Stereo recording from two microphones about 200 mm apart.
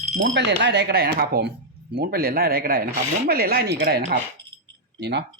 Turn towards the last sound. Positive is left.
turn(degrees=-60)  # may be behind; listen again after turning